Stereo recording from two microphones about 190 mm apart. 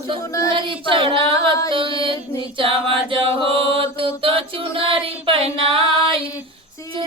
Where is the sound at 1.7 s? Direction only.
25° right (ahead or behind).